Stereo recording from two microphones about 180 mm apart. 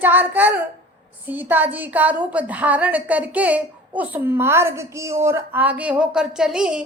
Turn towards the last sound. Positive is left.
turn(degrees=-5)  # may be behind; listen again after turning